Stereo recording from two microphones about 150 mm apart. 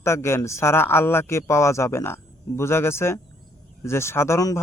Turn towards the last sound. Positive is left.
turn(degrees=20)  # may be behind; listen again after turning